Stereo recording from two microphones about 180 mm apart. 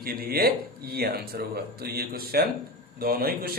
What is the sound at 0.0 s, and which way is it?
A man's voice, 55° right (ahead or behind).